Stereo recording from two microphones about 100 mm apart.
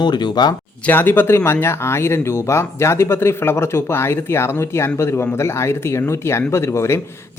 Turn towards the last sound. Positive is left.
turn(degrees=30)  # may be behind; listen again after turning